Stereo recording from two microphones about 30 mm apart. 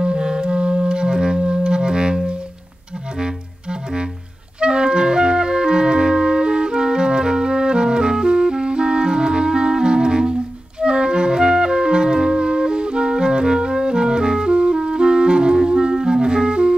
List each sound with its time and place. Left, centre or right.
0.0 s music: right
4.6 s clarinet: right
10.8 s music: right